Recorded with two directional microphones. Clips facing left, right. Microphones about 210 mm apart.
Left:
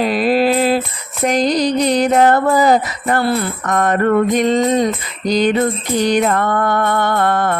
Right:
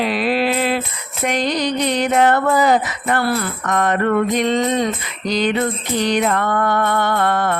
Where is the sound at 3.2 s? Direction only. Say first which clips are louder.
Left 3 dB; 25° left (ahead or behind).